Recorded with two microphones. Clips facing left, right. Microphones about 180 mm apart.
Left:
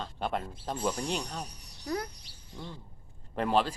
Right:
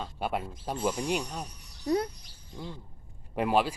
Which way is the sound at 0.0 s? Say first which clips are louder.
Right 1 dB; 10° right (ahead or behind).